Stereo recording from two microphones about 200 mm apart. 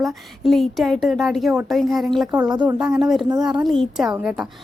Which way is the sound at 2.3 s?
20° right (ahead or behind).